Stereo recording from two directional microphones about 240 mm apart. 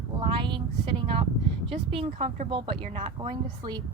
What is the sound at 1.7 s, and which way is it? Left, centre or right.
Speech, right.